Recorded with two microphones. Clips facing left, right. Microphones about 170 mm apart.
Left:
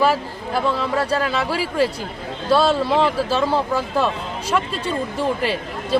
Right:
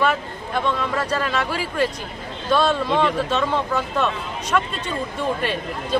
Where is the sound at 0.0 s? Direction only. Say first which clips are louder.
Left 3 dB; 30° left (ahead or behind).